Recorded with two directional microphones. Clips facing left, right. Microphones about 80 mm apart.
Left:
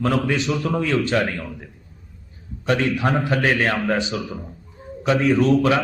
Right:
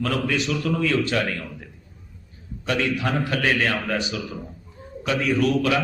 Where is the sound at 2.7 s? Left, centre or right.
Left.